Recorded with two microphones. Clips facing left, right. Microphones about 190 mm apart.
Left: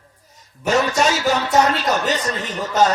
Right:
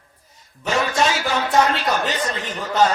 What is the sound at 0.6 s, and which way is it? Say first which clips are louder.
A man's voice: left 3 dB; 40° left (ahead or behind).